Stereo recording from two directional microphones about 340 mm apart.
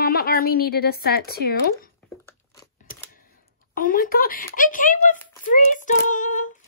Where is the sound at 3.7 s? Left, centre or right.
Left.